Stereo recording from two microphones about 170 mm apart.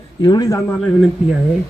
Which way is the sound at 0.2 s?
25° left (ahead or behind).